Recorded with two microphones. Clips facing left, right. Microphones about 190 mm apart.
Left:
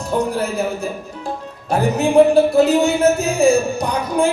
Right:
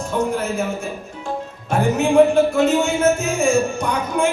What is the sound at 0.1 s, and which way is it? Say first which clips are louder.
Speech: left 2 dB; 35° left (ahead or behind).